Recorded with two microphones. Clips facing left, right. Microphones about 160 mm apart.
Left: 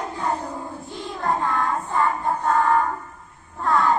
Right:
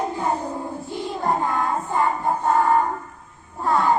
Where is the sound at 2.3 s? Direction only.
15° right (ahead or behind).